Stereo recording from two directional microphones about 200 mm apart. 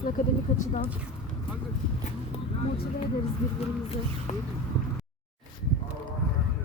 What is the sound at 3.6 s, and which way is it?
Speech, 30° left (ahead or behind).